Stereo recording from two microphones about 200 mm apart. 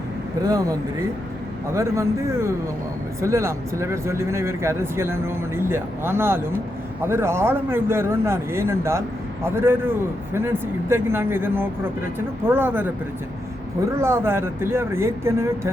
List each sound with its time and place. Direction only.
0.4 s speech: 15° right (ahead or behind)
1.7 s speech: 15° right (ahead or behind)
14.0 s speech: 10° right (ahead or behind)